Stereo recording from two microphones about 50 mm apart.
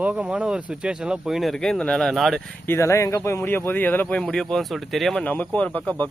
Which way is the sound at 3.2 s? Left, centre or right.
Left.